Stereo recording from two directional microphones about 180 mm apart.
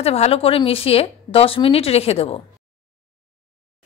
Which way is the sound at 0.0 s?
35° left (ahead or behind).